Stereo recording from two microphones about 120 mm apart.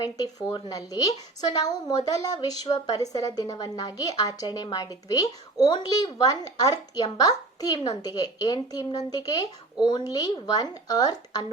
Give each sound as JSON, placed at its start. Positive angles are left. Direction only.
{"t": 0.0, "sound": "a woman's voice", "side_deg": 30}